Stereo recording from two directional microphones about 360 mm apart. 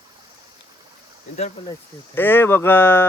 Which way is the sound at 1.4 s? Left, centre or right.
Centre.